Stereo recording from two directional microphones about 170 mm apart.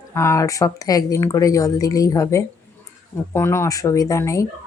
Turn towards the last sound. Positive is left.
turn(degrees=20)  # may be behind; listen again after turning